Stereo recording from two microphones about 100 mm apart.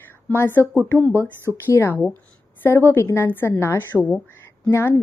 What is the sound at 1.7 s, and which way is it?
A woman's voice, 25° left (ahead or behind).